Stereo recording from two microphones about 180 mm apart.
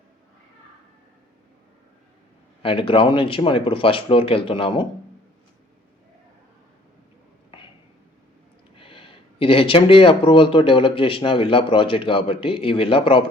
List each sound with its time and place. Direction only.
2.6 s speech: 30° left (ahead or behind)
8.7 s speech: 30° left (ahead or behind)